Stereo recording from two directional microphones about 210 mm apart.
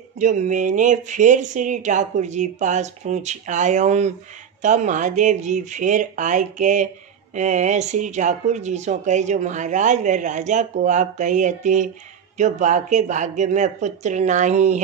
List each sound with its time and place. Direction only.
0.2 s speech: 35° right (ahead or behind)